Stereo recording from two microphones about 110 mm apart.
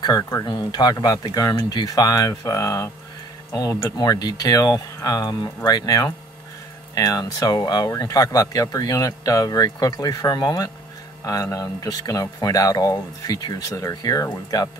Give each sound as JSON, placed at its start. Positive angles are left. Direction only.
{"t": 0.0, "sound": "speech", "side_deg": 35}
{"t": 0.5, "sound": "speech", "side_deg": 40}